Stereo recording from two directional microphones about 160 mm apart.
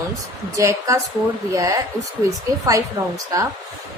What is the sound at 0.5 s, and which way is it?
Speech, 20° right (ahead or behind).